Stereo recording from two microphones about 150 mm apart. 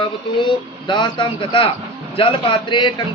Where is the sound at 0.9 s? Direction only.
30° left (ahead or behind).